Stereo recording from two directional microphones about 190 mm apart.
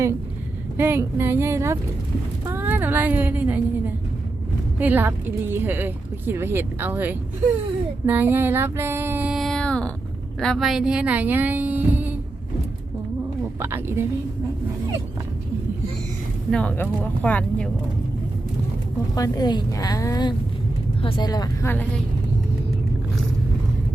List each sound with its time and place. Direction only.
0.8 s speech: 10° right (ahead or behind)
8.0 s female singing: 10° right (ahead or behind); by 9.9 s 5° left (ahead or behind)
10.4 s a woman's voice: centre (ahead or behind)
13.6 s speech: 10° right (ahead or behind)
16.5 s speech: 5° left (ahead or behind)
19.1 s a woman's voice: 20° left (ahead or behind)